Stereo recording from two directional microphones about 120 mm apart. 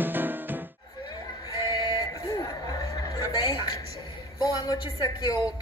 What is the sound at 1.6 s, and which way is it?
Music, 35° left (ahead or behind).